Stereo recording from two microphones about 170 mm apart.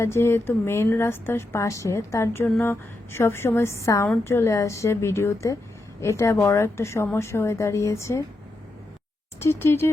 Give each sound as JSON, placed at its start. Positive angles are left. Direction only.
{"t": 0.0, "sound": "a woman's voice", "side_deg": 15}
{"t": 9.4, "sound": "a woman's voice", "side_deg": 15}